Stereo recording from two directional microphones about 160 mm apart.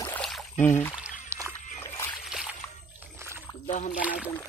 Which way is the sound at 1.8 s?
15° left (ahead or behind).